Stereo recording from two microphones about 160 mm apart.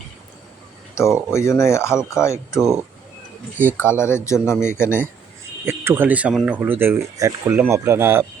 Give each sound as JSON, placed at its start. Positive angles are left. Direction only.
{"t": 1.0, "sound": "a man's voice", "side_deg": 20}
{"t": 3.8, "sound": "a man's voice", "side_deg": 15}
{"t": 5.6, "sound": "speech", "side_deg": -15}